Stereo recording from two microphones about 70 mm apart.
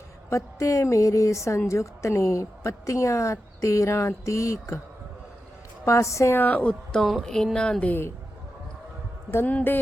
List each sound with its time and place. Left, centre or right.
0.3 s a woman's voice: left
5.8 s a woman's voice: left
6.4 s a woman's voice: left
6.9 s speech: centre
7.9 s speech: left
9.3 s speech: left